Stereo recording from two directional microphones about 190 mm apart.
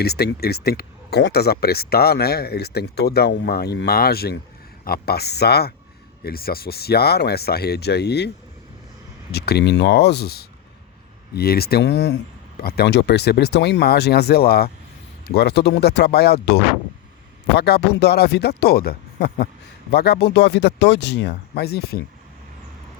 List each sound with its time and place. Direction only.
0.0 s speech: 55° left (ahead or behind)
9.3 s speech: 60° left (ahead or behind)